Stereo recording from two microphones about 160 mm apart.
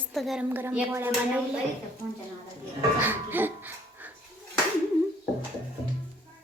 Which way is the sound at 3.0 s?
10° right (ahead or behind).